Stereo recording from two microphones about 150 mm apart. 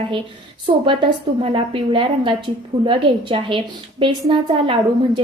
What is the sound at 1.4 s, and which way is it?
A woman's voice, 35° right (ahead or behind).